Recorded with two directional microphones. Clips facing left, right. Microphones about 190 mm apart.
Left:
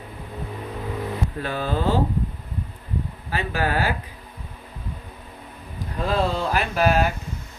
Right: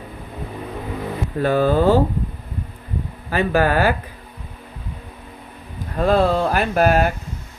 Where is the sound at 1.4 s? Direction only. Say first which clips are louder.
Right 10 dB; 45° right (ahead or behind).